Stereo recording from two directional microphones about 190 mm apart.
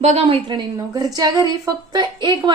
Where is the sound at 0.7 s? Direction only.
20° right (ahead or behind).